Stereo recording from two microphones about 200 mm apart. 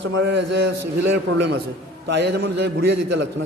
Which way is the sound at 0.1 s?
60° right (ahead or behind).